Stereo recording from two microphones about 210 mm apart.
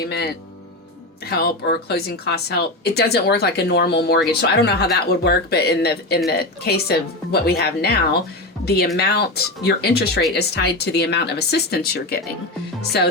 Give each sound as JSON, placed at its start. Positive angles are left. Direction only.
{"t": 0.0, "sound": "speech", "side_deg": 50}